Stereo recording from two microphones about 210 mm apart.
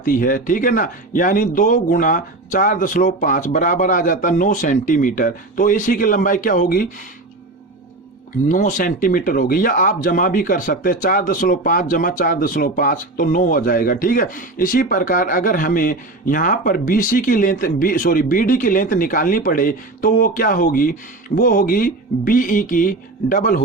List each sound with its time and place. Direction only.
0.0 s speech: 40° left (ahead or behind)
8.4 s speech: 40° left (ahead or behind)